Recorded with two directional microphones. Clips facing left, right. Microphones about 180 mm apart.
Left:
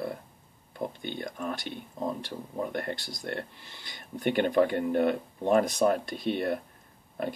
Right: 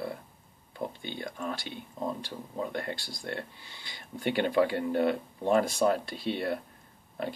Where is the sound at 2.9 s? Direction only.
20° left (ahead or behind).